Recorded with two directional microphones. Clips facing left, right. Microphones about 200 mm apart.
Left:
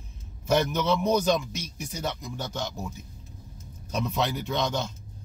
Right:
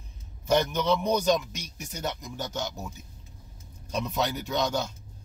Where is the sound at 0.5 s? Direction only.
5° left (ahead or behind).